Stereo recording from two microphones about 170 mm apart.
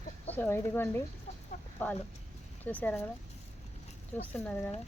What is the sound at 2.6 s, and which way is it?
Speech, 10° left (ahead or behind).